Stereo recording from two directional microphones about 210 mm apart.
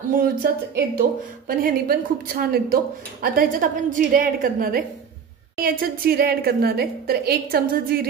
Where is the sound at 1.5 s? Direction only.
45° right (ahead or behind).